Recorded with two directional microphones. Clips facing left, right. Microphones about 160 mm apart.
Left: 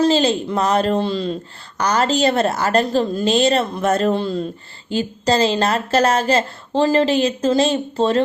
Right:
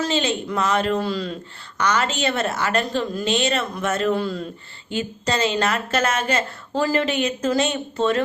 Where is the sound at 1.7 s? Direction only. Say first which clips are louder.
Left 4 dB; 35° left (ahead or behind).